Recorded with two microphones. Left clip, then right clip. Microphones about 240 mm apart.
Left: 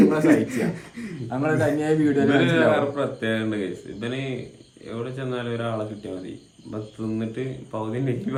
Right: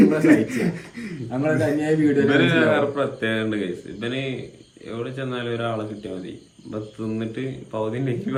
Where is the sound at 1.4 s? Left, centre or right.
Centre.